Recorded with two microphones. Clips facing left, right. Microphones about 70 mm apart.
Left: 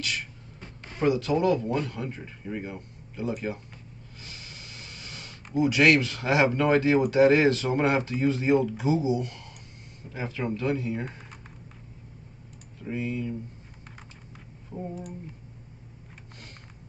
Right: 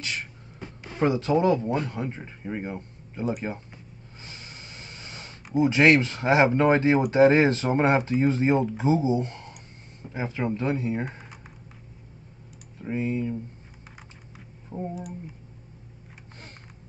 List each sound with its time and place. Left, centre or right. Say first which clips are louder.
0.0 s speech: even; right
4.2 s a sound: right 2 dB; right
7.1 s speech: right 2 dB; right
12.8 s speech: right 3 dB; right
14.7 s speech: right 3 dB; right